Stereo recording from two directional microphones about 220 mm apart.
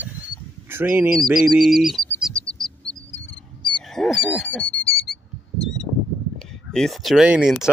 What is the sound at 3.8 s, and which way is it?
Wild animals, centre (ahead or behind).